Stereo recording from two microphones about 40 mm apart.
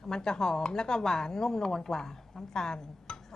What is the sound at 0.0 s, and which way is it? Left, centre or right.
A woman's voice, centre.